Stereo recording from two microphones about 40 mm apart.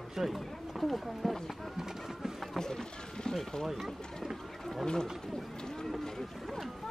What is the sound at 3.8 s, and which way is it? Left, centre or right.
Run, centre.